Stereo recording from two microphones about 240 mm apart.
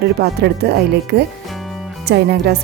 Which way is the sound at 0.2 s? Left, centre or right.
Right.